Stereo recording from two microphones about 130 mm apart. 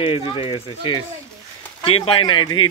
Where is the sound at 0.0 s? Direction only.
50° left (ahead or behind).